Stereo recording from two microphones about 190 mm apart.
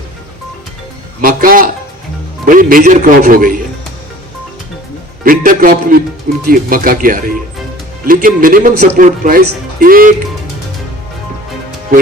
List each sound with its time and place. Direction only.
1.2 s speech: 45° right (ahead or behind)
5.2 s speech: 45° right (ahead or behind)